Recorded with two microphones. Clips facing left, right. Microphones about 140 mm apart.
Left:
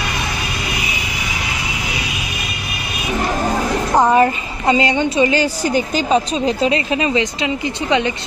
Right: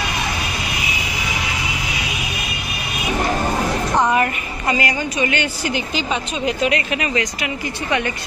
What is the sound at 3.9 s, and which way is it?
A woman's voice, 30° left (ahead or behind).